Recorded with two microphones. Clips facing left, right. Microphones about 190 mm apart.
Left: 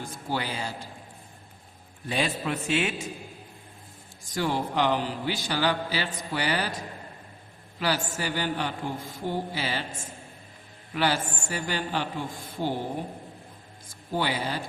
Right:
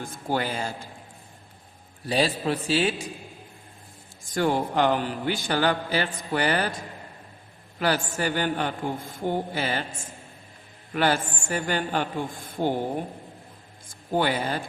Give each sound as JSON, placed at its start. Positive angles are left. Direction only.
{"t": 0.0, "sound": "a man's voice", "side_deg": -50}
{"t": 2.0, "sound": "a man's voice", "side_deg": -35}
{"t": 4.4, "sound": "a man's voice", "side_deg": -50}
{"t": 7.8, "sound": "a man's voice", "side_deg": -50}
{"t": 10.9, "sound": "a man's voice", "side_deg": -50}
{"t": 12.6, "sound": "speech", "side_deg": -65}
{"t": 14.1, "sound": "a man's voice", "side_deg": -50}